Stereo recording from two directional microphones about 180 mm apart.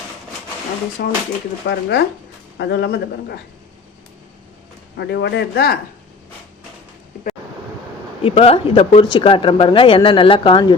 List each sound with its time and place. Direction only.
1.0 s speech: 55° left (ahead or behind)
1.6 s a man's voice: 70° left (ahead or behind)
4.9 s a man's voice: 70° left (ahead or behind)
8.2 s speech: 30° left (ahead or behind)